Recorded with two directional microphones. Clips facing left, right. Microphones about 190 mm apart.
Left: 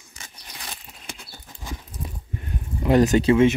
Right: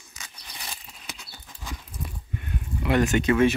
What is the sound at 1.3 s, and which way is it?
Clip-clop, 20° left (ahead or behind).